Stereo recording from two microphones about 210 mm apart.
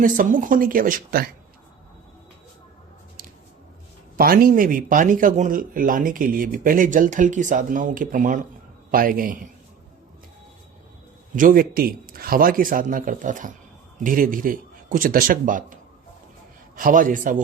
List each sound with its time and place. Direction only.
0.0 s speech: 40° right (ahead or behind)
4.2 s speech: 45° right (ahead or behind)
11.3 s speech: 40° right (ahead or behind)